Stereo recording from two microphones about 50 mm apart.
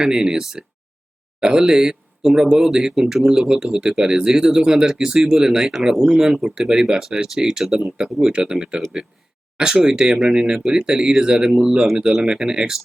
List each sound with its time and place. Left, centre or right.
0.0 s speech: centre